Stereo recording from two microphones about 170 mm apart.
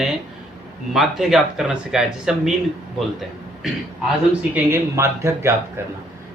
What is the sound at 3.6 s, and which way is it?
Speech, centre (ahead or behind).